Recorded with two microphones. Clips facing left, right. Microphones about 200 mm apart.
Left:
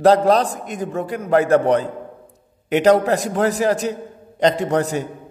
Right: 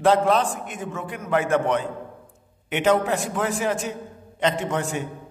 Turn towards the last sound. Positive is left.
turn(degrees=35)  # may be behind; listen again after turning